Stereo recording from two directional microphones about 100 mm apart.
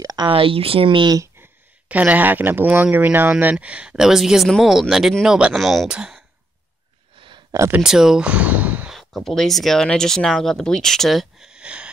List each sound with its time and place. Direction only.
0.0 s a sound: 40° right (ahead or behind)
0.3 s speech: 65° right (ahead or behind)
1.4 s speech: 15° right (ahead or behind)
7.2 s a sound: 55° right (ahead or behind)
7.8 s speech: 5° right (ahead or behind)
8.9 s speech: centre (ahead or behind)